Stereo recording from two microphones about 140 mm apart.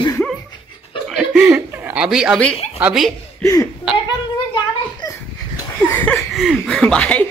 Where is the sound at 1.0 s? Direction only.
5° right (ahead or behind).